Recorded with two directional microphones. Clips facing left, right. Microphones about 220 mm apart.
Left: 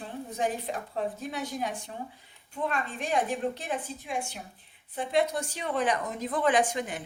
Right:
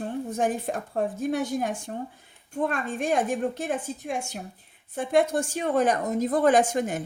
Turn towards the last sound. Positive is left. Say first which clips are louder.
# right 5 dB
turn(degrees=-45)  # may be behind; listen again after turning